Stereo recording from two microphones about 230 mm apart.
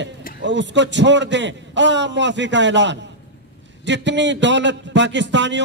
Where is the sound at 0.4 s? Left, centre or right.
Right.